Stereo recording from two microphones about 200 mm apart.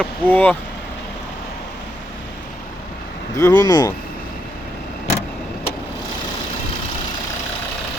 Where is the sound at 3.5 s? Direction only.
20° left (ahead or behind).